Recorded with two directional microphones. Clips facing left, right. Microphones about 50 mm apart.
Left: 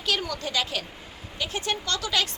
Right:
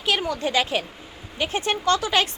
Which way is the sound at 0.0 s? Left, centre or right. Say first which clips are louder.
Right 5 dB; right.